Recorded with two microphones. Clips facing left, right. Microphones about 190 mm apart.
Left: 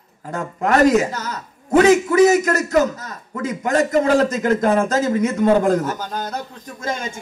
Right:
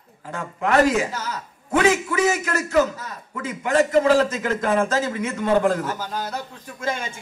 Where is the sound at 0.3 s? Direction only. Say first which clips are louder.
Left 3 dB; 40° left (ahead or behind).